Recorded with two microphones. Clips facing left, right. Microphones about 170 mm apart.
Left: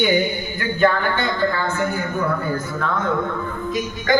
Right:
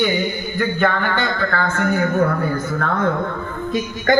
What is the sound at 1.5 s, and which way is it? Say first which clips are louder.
Speech: right 3 dB; 60° right (ahead or behind).